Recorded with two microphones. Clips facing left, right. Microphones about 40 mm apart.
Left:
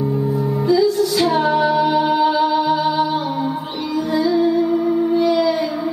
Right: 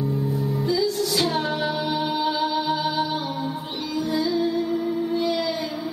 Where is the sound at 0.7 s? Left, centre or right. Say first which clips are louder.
Left 9 dB; centre.